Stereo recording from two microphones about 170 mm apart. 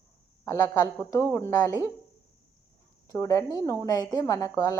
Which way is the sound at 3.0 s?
20° left (ahead or behind).